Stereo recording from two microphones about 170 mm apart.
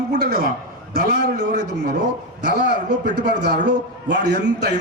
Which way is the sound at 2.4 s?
85° right.